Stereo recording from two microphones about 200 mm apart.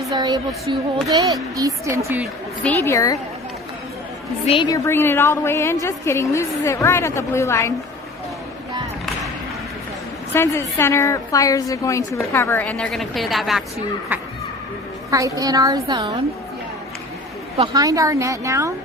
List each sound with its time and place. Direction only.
0.1 s a woman's voice: 20° right (ahead or behind)
2.6 s a woman's voice: 10° left (ahead or behind)
4.4 s a woman's voice: 25° left (ahead or behind)
4.9 s a woman's voice: 10° left (ahead or behind)
10.3 s a woman's voice: 10° left (ahead or behind)
15.1 s a woman's voice: 15° right (ahead or behind)
17.7 s a woman's voice: 15° right (ahead or behind)